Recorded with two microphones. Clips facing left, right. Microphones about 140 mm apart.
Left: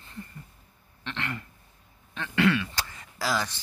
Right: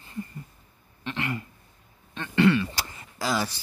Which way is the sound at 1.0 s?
10° right (ahead or behind).